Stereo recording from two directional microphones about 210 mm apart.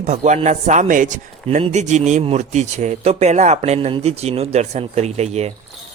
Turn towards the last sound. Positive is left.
turn(degrees=-30)  # may be behind; listen again after turning